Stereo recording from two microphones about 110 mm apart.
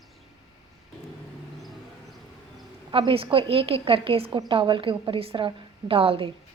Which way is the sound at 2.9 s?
55° right (ahead or behind).